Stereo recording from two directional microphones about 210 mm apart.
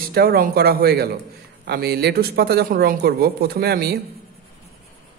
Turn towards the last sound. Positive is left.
turn(degrees=-50)  # may be behind; listen again after turning